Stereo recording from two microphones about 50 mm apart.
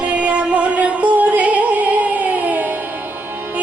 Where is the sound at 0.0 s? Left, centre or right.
Right.